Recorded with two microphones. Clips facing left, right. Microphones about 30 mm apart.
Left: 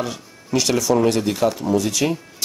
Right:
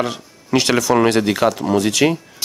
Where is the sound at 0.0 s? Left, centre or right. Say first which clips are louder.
Right 5 dB; right.